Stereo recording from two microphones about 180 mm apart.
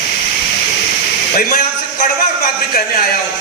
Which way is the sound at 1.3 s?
50° left (ahead or behind).